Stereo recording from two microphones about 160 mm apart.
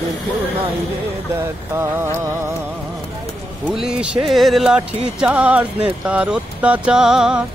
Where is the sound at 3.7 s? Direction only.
5° right (ahead or behind).